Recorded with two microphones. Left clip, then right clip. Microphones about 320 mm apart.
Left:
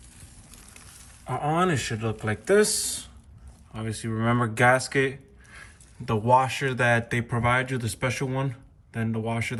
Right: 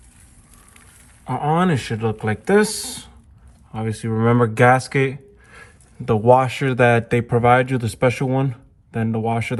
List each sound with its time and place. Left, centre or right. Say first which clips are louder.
1.2 s speech: right 5 dB; centre